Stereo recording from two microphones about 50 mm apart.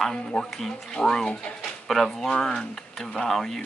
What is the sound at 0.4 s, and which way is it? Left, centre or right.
Speech, centre.